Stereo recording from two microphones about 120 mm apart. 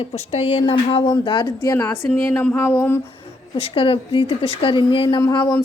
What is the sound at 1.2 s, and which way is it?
Speech, 40° left (ahead or behind).